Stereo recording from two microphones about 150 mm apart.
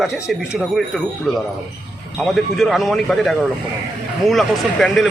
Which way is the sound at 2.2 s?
Centre (ahead or behind).